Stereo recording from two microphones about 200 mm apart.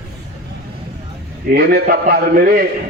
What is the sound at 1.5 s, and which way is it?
A man's voice, 50° right (ahead or behind).